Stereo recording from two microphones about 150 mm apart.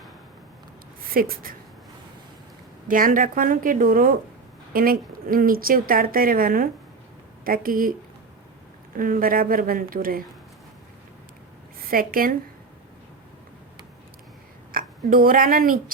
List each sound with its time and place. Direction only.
1.1 s speech: 75° right (ahead or behind)
2.8 s speech: 65° right (ahead or behind)
9.0 s speech: 70° right (ahead or behind)
11.9 s speech: 70° right (ahead or behind)
14.7 s speech: 75° right (ahead or behind)